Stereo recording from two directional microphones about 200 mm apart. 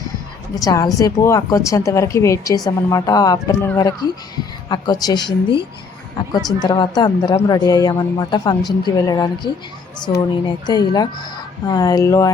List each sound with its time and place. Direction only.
0.6 s a woman's voice: 15° left (ahead or behind)